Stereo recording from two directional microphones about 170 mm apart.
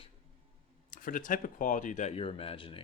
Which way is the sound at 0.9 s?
55° left (ahead or behind).